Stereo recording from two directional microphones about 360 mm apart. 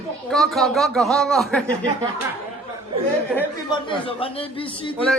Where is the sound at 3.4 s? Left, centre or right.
Centre.